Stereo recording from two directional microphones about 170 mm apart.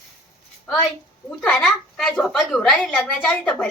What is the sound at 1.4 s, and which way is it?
A woman's voice, 5° left (ahead or behind).